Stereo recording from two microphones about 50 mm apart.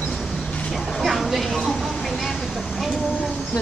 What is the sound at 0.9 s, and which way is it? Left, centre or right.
Vehicle, centre.